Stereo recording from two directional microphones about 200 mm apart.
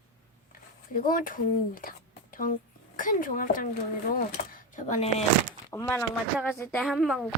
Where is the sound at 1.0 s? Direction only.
45° left (ahead or behind).